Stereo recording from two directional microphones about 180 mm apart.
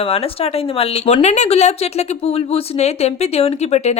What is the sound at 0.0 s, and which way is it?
Speech, 30° left (ahead or behind).